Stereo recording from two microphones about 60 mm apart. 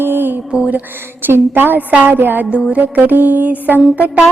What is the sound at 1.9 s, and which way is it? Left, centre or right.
Music, right.